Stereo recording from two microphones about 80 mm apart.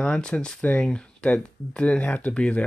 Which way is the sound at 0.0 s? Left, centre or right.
Centre.